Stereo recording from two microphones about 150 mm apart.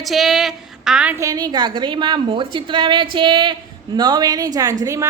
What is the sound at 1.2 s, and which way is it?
A woman's voice, 25° right (ahead or behind).